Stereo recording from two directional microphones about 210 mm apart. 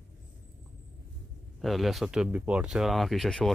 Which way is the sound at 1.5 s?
Centre (ahead or behind).